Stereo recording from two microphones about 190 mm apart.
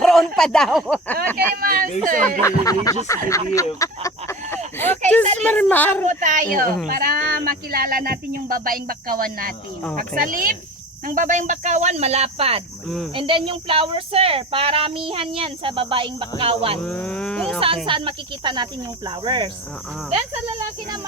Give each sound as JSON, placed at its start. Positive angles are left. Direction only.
{"t": 0.0, "sound": "speech", "side_deg": 0}
{"t": 1.6, "sound": "speech", "side_deg": -50}
{"t": 2.4, "sound": "speech", "side_deg": 20}
{"t": 6.1, "sound": "speech", "side_deg": -40}
{"t": 16.8, "sound": "speech", "side_deg": 5}
{"t": 17.8, "sound": "speech", "side_deg": -25}